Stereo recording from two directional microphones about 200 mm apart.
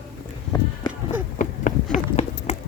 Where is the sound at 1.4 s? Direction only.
40° left (ahead or behind).